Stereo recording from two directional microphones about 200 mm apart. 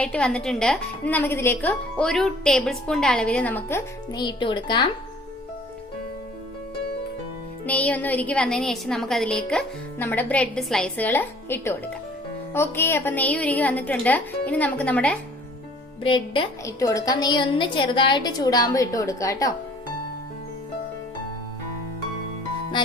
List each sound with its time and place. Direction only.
0.0 s a woman's voice: 5° left (ahead or behind); by 4.9 s 25° left (ahead or behind)
7.6 s a woman's voice: 5° left (ahead or behind)
16.0 s a woman's voice: 25° left (ahead or behind)